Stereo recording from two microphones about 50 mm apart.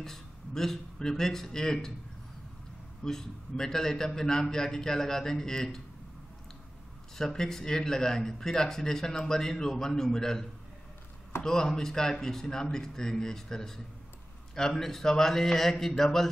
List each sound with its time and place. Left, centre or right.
0.0 s speech: centre
3.0 s speech: centre
7.2 s speech: centre
11.4 s speech: centre